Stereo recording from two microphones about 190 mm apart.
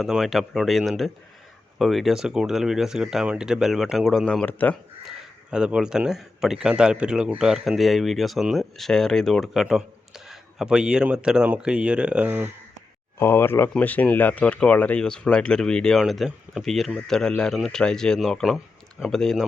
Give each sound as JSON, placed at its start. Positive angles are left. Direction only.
{"t": 0.0, "sound": "speech", "side_deg": 0}
{"t": 5.5, "sound": "speech", "side_deg": -5}
{"t": 13.1, "sound": "speech", "side_deg": 10}